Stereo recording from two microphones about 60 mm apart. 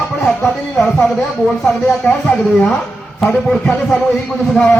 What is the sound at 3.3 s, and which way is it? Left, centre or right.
Speech, centre.